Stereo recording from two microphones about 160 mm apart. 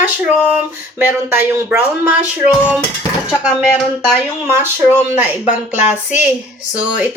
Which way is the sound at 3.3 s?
Centre (ahead or behind).